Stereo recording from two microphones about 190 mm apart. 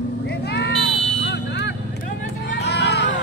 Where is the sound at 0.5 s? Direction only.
65° left (ahead or behind).